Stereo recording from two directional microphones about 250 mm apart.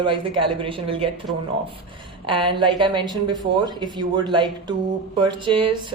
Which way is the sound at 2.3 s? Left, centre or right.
Centre.